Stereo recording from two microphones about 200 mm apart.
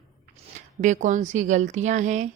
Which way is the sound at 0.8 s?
40° right (ahead or behind).